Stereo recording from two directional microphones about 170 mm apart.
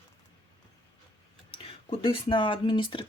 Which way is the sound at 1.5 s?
30° left (ahead or behind).